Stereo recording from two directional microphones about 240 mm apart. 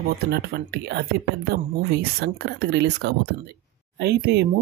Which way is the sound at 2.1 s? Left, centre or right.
Right.